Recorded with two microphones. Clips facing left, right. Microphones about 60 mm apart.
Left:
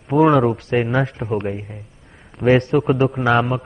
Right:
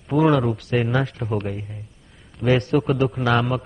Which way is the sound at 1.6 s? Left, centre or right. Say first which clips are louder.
Left 2 dB; left.